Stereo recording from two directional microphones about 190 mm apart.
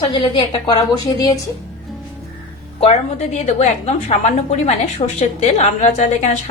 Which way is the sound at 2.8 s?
35° left (ahead or behind).